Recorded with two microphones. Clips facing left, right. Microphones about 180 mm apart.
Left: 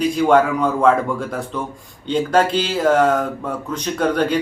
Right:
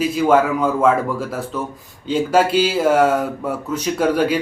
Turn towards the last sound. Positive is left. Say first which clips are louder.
# right 1 dB
turn(degrees=-5)  # may be behind; listen again after turning